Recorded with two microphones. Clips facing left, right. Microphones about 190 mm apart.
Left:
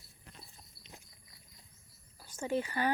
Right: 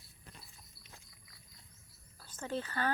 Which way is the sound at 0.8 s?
20° left (ahead or behind).